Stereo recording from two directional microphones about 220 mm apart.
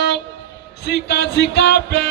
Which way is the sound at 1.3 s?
50° left (ahead or behind).